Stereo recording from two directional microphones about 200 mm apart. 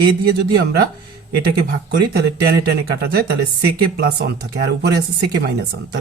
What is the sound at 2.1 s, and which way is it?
Speech, 50° right (ahead or behind).